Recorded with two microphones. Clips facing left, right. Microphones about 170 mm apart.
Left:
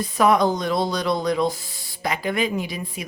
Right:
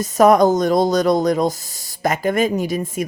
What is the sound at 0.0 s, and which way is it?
Speech, 45° right (ahead or behind).